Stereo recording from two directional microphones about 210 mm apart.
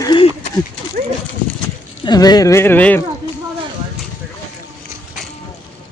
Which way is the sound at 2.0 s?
20° left (ahead or behind).